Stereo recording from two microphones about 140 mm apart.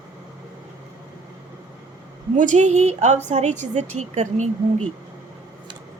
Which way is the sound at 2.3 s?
65° right (ahead or behind).